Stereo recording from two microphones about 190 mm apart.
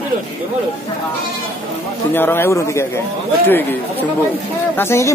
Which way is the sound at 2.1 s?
10° left (ahead or behind).